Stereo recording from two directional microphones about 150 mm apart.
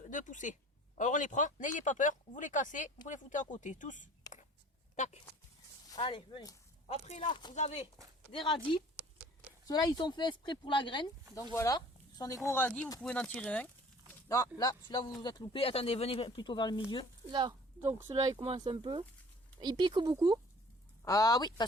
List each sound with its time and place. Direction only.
0.0 s speech: 60° left (ahead or behind)
6.0 s speech: 35° left (ahead or behind)
7.5 s speech: 45° left (ahead or behind)
8.3 s speech: 35° left (ahead or behind)
11.5 s speech: 20° left (ahead or behind)
14.6 s speech: 25° left (ahead or behind)
17.7 s speech: 15° right (ahead or behind)
18.1 s speech: 30° right (ahead or behind)
18.4 s speech: 40° right (ahead or behind)
21.0 s speech: 25° left (ahead or behind)